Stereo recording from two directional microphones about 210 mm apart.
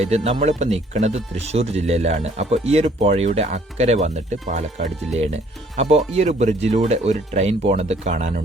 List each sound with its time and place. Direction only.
0.0 s speech: 30° right (ahead or behind)